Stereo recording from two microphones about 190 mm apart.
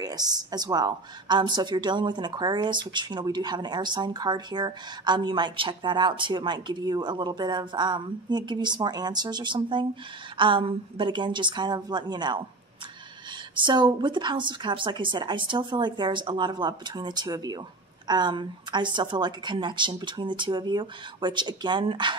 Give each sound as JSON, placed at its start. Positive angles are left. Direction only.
{"t": 0.0, "sound": "speech", "side_deg": -20}
{"t": 13.6, "sound": "speech", "side_deg": -25}